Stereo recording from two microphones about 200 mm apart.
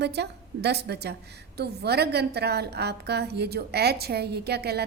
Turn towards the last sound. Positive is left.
turn(degrees=-55)  # may be behind; listen again after turning